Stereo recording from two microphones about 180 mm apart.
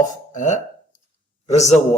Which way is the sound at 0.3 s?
40° left (ahead or behind).